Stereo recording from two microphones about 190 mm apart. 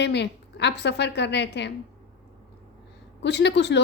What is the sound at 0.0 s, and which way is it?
A woman's voice, 65° left (ahead or behind).